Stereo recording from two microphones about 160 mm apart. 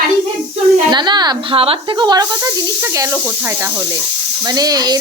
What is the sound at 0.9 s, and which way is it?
Speech, 30° right (ahead or behind).